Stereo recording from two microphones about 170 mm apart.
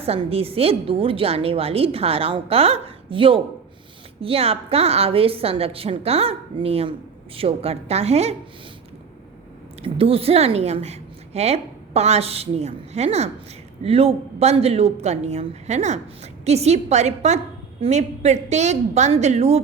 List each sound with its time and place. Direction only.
0.0 s a woman's voice: 35° right (ahead or behind)
9.8 s a woman's voice: 35° right (ahead or behind)